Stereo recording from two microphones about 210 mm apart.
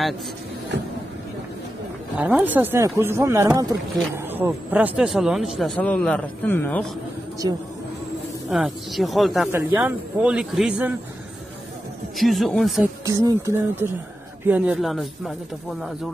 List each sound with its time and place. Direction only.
2.1 s a man's voice: 10° right (ahead or behind); by 6.9 s 10° left (ahead or behind)
7.4 s speech: 20° right (ahead or behind)
8.5 s speech: centre (ahead or behind)
9.5 s a man's voice: 10° right (ahead or behind)
12.2 s speech: centre (ahead or behind)
13.0 s a man's voice: 15° right (ahead or behind); by 15.3 s centre (ahead or behind)